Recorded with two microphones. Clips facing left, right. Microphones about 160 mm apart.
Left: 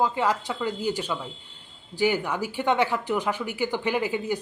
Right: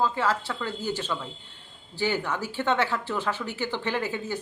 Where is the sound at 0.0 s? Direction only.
15° left (ahead or behind).